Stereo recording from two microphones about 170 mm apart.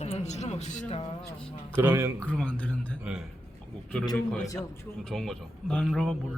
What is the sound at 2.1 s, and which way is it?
Speech, 5° left (ahead or behind).